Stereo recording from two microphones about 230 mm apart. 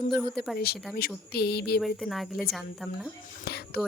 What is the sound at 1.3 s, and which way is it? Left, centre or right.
Speech, left.